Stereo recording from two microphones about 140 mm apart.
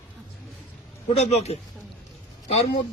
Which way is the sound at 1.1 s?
55° left (ahead or behind).